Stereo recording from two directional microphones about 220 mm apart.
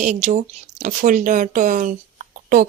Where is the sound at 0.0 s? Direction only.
35° right (ahead or behind).